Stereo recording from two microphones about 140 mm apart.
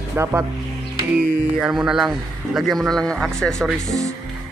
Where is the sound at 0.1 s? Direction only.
20° right (ahead or behind).